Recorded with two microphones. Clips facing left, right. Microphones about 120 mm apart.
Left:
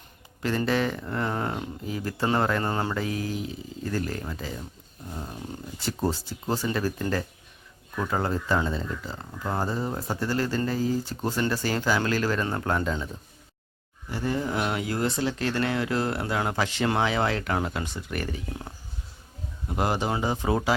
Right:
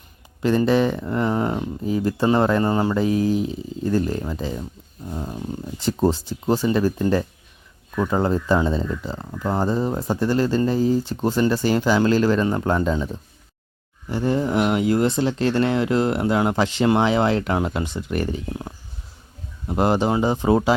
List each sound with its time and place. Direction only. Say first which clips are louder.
0.4 s speech: right 7 dB; 20° right (ahead or behind)
5.8 s speech: right 8 dB; 20° right (ahead or behind)
14.1 s speech: right 7 dB; 25° right (ahead or behind)